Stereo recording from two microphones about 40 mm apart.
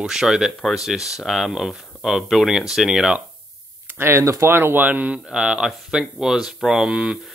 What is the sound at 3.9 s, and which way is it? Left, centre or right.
Speech, right.